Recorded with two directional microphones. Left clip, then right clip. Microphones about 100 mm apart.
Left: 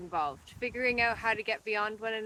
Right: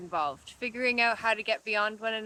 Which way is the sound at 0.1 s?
25° right (ahead or behind).